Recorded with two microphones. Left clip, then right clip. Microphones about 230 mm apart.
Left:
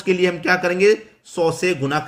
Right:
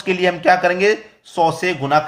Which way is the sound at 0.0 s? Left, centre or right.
Centre.